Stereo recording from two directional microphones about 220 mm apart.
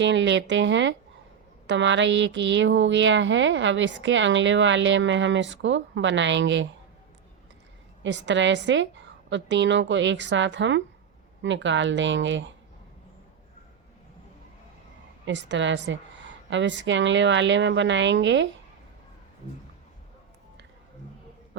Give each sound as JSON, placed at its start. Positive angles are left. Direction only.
{"t": 0.0, "sound": "speech", "side_deg": -55}
{"t": 8.0, "sound": "speech", "side_deg": -55}
{"t": 15.3, "sound": "speech", "side_deg": -55}